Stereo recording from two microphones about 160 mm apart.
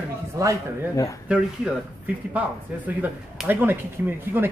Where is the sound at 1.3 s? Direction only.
5° right (ahead or behind).